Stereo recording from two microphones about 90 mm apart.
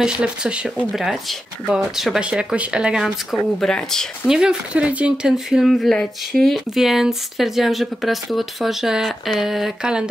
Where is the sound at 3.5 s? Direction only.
5° left (ahead or behind).